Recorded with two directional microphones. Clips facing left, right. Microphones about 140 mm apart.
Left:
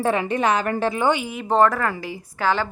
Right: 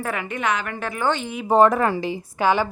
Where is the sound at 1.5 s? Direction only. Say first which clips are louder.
Right 2 dB; 15° right (ahead or behind).